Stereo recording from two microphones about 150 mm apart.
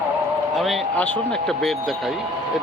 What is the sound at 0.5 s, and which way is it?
Speech, centre (ahead or behind).